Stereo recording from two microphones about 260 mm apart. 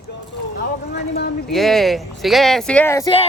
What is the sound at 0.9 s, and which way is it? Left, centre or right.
Speech, left.